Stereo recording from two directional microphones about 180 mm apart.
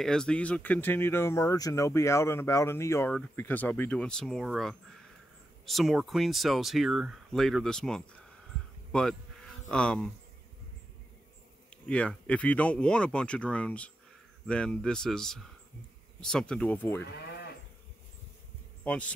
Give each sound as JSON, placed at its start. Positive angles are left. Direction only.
{"t": 0.0, "sound": "speech", "side_deg": 5}
{"t": 11.7, "sound": "speech", "side_deg": 5}
{"t": 17.0, "sound": "livestock", "side_deg": 70}
{"t": 18.9, "sound": "speech", "side_deg": 5}